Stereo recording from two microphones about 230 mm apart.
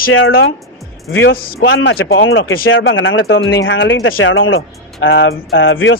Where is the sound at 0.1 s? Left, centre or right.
Left.